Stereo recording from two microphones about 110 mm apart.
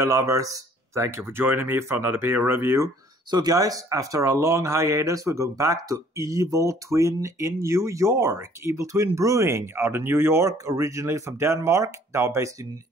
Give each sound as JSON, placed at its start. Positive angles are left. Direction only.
{"t": 0.0, "sound": "speech", "side_deg": -30}
{"t": 3.3, "sound": "speech", "side_deg": -35}